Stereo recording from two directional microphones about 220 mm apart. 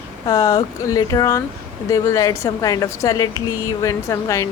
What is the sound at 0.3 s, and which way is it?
Speech, 15° left (ahead or behind).